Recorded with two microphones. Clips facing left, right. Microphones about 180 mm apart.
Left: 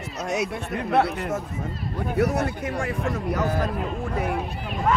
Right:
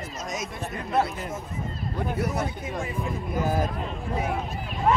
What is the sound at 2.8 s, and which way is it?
Speech, 80° left.